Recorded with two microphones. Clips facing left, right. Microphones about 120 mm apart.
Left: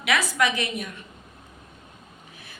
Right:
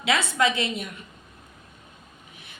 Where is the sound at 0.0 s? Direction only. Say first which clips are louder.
Right 1 dB; 25° right (ahead or behind).